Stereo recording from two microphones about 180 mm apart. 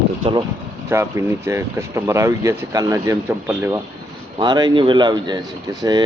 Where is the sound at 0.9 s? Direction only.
15° right (ahead or behind).